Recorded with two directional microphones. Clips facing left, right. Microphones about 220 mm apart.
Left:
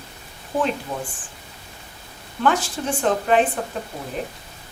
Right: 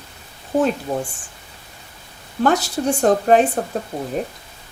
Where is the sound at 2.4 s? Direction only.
40° right (ahead or behind).